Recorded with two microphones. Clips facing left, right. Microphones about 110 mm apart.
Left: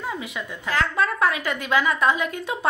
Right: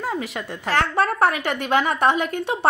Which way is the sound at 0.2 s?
70° right (ahead or behind).